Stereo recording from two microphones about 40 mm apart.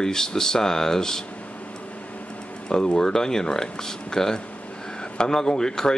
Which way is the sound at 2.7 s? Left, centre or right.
Centre.